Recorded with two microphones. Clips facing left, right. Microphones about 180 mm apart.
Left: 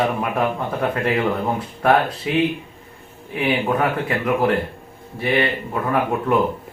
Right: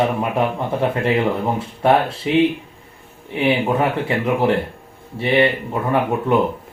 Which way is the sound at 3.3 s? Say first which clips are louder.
Right 2 dB; 25° right (ahead or behind).